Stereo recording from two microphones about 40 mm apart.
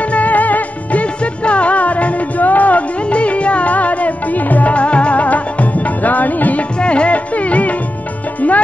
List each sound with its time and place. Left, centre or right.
0.0 s music: left
1.2 s music: left
6.8 s music: left